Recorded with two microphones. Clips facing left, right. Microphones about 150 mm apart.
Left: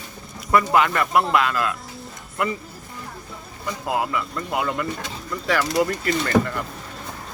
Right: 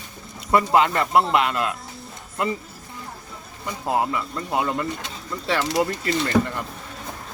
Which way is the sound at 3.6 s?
25° right (ahead or behind).